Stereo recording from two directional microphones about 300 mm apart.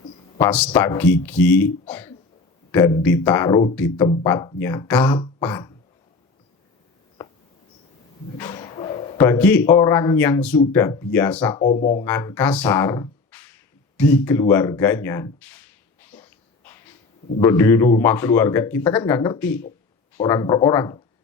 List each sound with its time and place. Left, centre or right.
0.3 s speech: centre
5.4 s beatboxing: centre
8.4 s bow-wow: centre
9.1 s speech: centre
11.8 s speech: left
12.0 s speech: centre
16.1 s a sound: centre
17.4 s speech: centre